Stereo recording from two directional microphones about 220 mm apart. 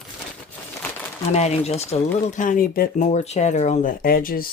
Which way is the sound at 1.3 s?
30° left (ahead or behind).